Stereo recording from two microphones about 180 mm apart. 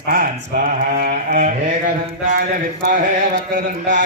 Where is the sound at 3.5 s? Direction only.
45° right (ahead or behind).